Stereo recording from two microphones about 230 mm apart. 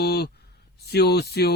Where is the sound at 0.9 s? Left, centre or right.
Left.